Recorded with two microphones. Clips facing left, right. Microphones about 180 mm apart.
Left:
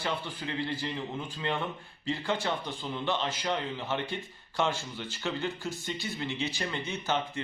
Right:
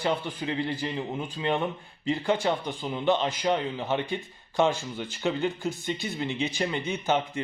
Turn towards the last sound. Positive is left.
turn(degrees=-15)  # may be behind; listen again after turning